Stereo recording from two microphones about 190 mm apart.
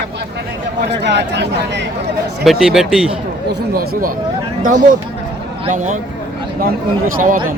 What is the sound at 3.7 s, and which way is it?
Speech, 45° right (ahead or behind).